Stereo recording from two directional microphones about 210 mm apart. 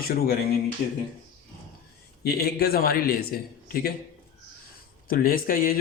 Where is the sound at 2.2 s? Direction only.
45° left (ahead or behind).